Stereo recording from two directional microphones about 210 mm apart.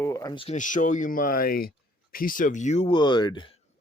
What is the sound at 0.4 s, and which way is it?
Speech, 35° left (ahead or behind).